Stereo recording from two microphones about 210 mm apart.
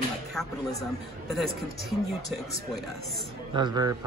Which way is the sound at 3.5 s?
20° right (ahead or behind).